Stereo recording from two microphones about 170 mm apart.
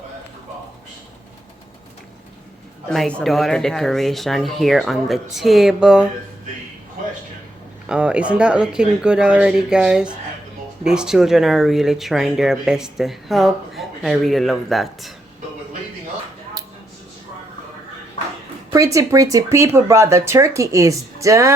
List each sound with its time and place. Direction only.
2.9 s speech: 5° left (ahead or behind)
7.9 s speech: 5° right (ahead or behind)
18.7 s speech: 20° right (ahead or behind)